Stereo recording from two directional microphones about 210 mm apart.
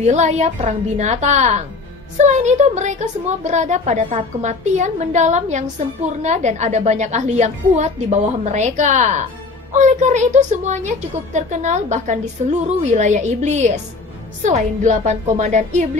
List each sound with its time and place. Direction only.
0.0 s a woman's voice: 35° right (ahead or behind)